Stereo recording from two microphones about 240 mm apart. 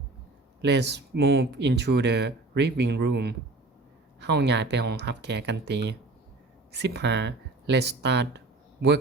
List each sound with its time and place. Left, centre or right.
0.6 s speech: right